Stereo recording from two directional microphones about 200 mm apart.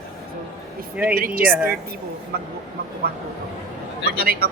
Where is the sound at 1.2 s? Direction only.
45° right (ahead or behind).